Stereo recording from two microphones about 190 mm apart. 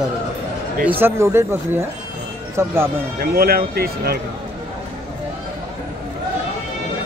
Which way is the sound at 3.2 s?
55° right (ahead or behind).